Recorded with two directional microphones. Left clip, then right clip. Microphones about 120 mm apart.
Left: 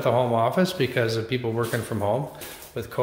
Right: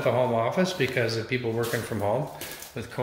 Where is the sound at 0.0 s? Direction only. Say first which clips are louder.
Left 2 dB; 45° left (ahead or behind).